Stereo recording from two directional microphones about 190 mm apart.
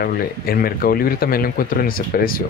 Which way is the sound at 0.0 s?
50° left (ahead or behind).